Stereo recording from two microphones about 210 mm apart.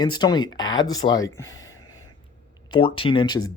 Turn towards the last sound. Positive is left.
turn(degrees=20)  # may be behind; listen again after turning